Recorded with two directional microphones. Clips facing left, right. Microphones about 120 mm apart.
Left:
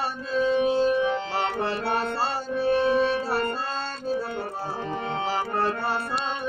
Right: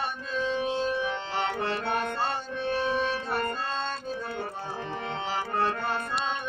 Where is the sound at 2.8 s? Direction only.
5° left (ahead or behind).